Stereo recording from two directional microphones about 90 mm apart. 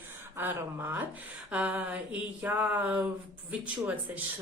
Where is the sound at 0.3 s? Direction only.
25° right (ahead or behind).